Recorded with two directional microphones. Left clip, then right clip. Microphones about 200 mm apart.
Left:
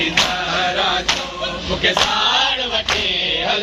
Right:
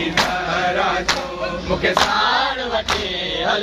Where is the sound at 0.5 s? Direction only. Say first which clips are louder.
Left 1 dB; 45° right (ahead or behind).